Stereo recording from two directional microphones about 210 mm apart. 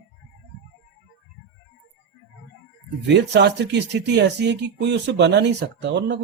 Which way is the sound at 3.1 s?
55° right (ahead or behind).